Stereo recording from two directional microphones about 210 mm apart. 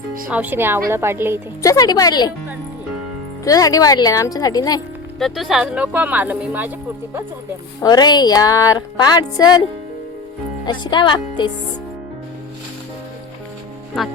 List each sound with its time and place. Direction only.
0.3 s speech: 5° right (ahead or behind)
1.6 s speech: 15° left (ahead or behind)
3.4 s speech: 15° left (ahead or behind)
5.2 s speech: centre (ahead or behind)
7.8 s speech: 20° left (ahead or behind)
10.7 s speech: 20° left (ahead or behind)